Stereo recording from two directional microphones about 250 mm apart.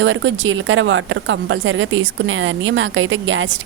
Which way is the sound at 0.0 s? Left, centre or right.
Right.